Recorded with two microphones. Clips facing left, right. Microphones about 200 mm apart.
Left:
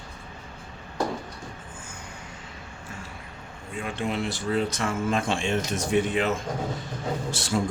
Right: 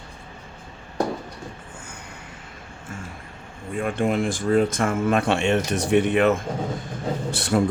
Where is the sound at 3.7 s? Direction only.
55° right (ahead or behind).